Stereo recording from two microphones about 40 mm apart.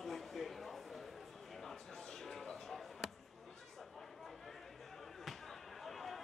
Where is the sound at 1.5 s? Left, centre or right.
Centre.